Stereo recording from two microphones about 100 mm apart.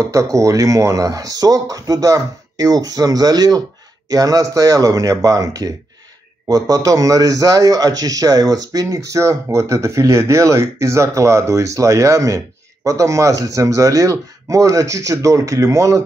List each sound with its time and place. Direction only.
0.0 s a man's voice: 30° right (ahead or behind)